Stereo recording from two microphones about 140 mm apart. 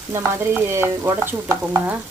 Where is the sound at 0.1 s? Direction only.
20° right (ahead or behind).